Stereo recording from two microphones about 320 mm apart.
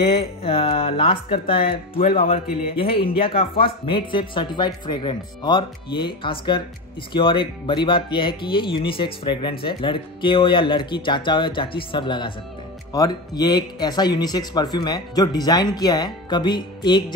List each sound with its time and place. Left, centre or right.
0.0 s speech: centre